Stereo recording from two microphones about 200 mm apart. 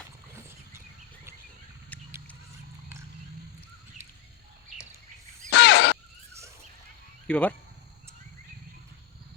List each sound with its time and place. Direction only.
1.9 s horse: 10° left (ahead or behind)
5.5 s a sound: 60° left (ahead or behind)
7.3 s speech: 5° left (ahead or behind)